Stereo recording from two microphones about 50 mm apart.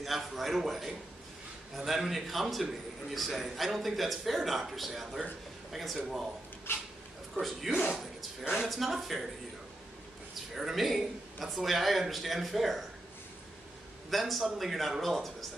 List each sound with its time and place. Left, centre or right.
0.0 s a man's voice: centre
6.7 s speech: left
7.3 s a man's voice: centre
8.0 s a sound: centre
8.6 s a man's voice: centre
10.5 s a man's voice: centre
14.1 s a man's voice: centre